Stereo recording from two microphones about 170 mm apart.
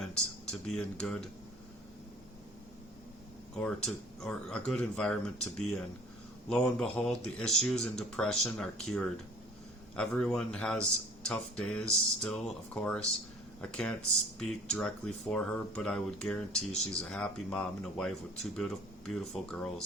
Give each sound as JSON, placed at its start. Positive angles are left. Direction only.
{"t": 0.0, "sound": "speech", "side_deg": 5}
{"t": 3.5, "sound": "speech", "side_deg": 5}